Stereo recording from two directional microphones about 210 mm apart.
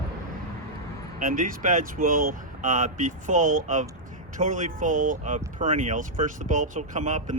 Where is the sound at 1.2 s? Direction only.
40° right (ahead or behind).